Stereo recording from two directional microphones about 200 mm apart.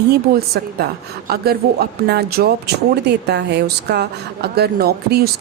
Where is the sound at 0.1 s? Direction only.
50° right (ahead or behind).